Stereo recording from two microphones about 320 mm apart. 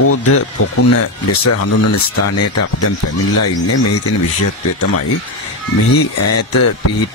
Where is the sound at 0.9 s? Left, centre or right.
Left.